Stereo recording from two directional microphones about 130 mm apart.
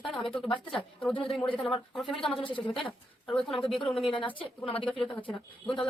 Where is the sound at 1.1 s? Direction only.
45° left (ahead or behind).